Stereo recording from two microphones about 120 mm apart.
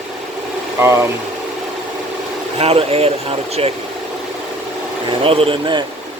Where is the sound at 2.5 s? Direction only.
55° right (ahead or behind).